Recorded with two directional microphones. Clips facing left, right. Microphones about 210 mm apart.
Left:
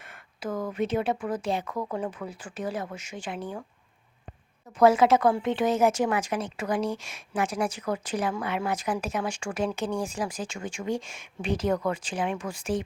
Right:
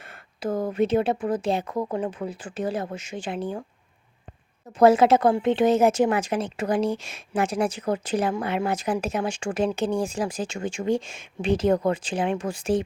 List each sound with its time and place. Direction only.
0.0 s speech: 30° right (ahead or behind)
4.8 s speech: 25° right (ahead or behind)